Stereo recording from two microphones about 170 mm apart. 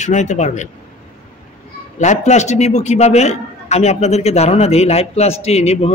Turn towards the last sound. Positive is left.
turn(degrees=40)  # may be behind; listen again after turning